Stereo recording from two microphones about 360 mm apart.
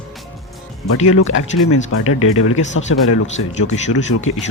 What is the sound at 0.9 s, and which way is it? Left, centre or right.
Speech, left.